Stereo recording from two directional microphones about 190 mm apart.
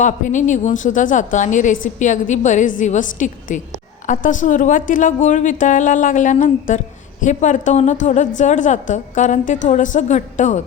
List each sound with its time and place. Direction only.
0.0 s a woman's voice: 40° left (ahead or behind)